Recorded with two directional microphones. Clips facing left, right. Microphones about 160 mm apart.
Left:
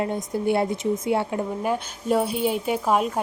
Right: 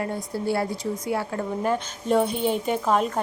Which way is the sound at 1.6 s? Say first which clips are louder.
Right 1 dB; 5° left (ahead or behind).